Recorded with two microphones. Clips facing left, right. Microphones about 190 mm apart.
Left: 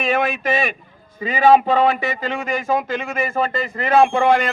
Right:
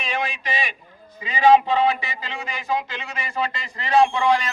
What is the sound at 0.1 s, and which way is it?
A man's voice, 45° left (ahead or behind).